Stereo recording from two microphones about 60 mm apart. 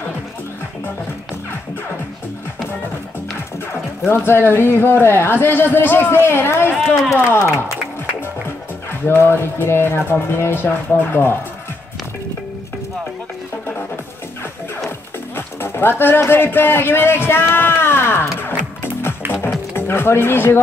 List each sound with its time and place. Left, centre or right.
3.7 s speech: left
9.0 s speech: left
15.3 s music: left
16.2 s speech: left
18.4 s music: left
19.7 s speech: left